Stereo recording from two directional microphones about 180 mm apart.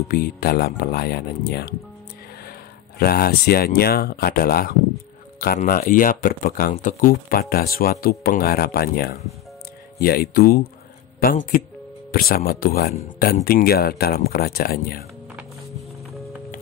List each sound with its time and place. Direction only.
0.1 s speech: 55° left (ahead or behind)
3.0 s speech: 60° left (ahead or behind)